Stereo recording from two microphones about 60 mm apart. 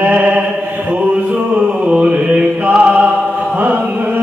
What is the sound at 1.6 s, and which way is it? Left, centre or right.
Mantra, centre.